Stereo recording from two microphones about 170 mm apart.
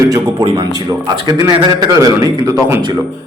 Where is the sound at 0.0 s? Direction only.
15° right (ahead or behind).